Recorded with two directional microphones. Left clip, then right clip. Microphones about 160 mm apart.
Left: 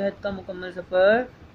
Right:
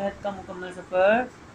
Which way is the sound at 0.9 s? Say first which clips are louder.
Left 2 dB; 55° left (ahead or behind).